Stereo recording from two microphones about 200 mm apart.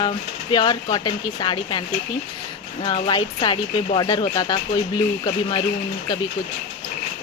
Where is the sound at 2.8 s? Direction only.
25° left (ahead or behind).